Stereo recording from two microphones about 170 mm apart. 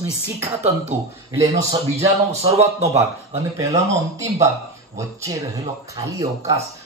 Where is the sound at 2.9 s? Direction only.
20° right (ahead or behind).